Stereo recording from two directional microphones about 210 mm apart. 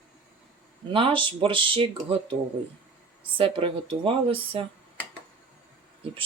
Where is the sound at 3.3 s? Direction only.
25° right (ahead or behind).